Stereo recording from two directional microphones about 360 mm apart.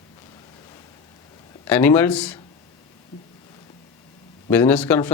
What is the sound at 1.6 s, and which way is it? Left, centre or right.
Speech, centre.